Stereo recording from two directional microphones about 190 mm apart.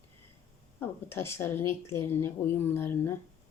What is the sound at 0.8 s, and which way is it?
A woman's voice, 15° left (ahead or behind).